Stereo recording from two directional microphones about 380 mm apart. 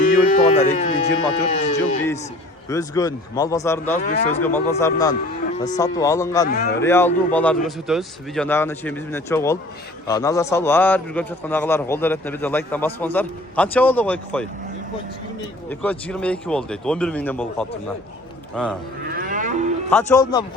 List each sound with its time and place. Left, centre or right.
0.0 s a man's voice: centre
4.0 s speech: left
4.4 s a man's voice: centre
15.7 s a man's voice: centre
19.1 s livestock: right
19.9 s a man's voice: centre